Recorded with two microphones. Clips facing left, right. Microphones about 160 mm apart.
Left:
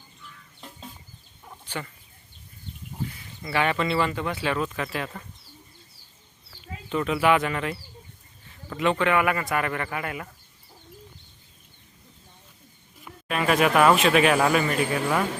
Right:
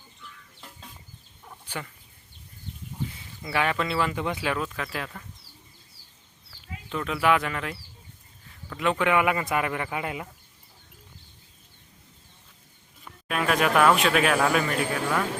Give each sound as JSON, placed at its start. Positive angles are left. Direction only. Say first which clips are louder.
{"t": 1.6, "sound": "fowl", "louder": "left 2 dB", "side_deg": -10}
{"t": 3.4, "sound": "speech", "louder": "left 2 dB", "side_deg": 0}
{"t": 4.1, "sound": "speech", "louder": "left 1 dB", "side_deg": -15}
{"t": 6.9, "sound": "speech", "louder": "left 2 dB", "side_deg": 5}
{"t": 8.4, "sound": "a sound", "louder": "left 2 dB", "side_deg": 0}
{"t": 9.0, "sound": "speech", "louder": "even", "side_deg": -15}
{"t": 13.1, "sound": "speech", "louder": "left 2 dB", "side_deg": 0}